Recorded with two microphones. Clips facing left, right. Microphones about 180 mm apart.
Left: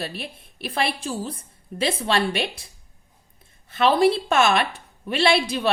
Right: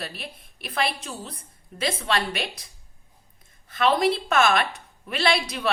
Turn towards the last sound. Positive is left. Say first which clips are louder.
# left 4 dB
turn(degrees=25)  # may be behind; listen again after turning